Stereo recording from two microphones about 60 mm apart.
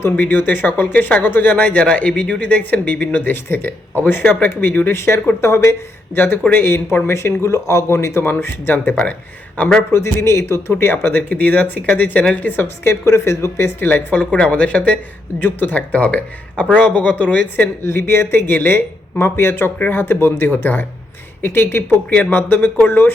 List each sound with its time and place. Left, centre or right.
0.2 s a woman's voice: left
4.9 s a woman's voice: left
8.2 s a woman's voice: left
9.9 s speech: left
10.9 s a woman's voice: left
13.9 s a man's voice: left
17.8 s a woman's voice: left